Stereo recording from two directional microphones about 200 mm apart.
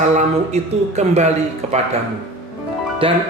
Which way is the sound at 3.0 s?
25° right (ahead or behind).